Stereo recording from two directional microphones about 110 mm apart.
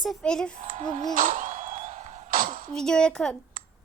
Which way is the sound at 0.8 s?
90° right.